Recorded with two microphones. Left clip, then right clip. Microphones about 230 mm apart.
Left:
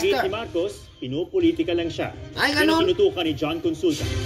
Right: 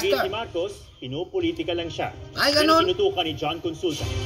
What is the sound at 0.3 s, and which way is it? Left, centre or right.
Speech, left.